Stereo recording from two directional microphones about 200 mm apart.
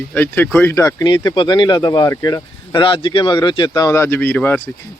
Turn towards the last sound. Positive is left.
turn(degrees=10)  # may be behind; listen again after turning